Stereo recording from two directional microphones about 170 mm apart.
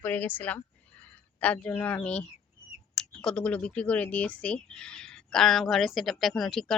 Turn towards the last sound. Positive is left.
turn(degrees=0)  # may be behind; listen again after turning